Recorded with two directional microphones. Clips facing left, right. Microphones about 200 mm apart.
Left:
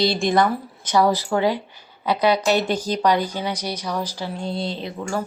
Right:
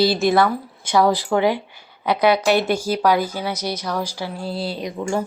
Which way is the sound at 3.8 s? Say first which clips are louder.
Even; 15° left (ahead or behind).